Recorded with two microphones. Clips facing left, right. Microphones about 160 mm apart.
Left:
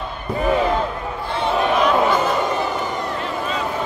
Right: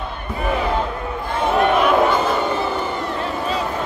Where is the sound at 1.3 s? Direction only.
45° right (ahead or behind).